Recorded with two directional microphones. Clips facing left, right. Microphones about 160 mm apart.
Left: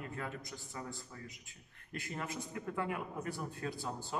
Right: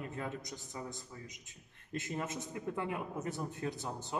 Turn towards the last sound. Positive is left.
turn(degrees=-20)  # may be behind; listen again after turning